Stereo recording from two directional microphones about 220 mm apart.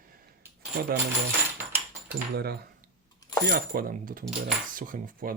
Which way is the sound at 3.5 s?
40° right (ahead or behind).